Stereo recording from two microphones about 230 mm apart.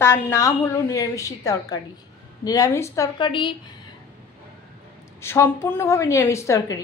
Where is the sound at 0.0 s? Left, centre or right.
Centre.